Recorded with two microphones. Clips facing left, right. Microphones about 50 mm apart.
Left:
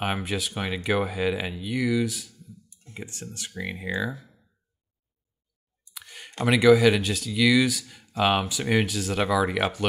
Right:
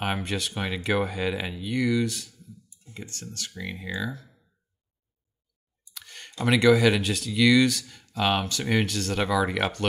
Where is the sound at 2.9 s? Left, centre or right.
Centre.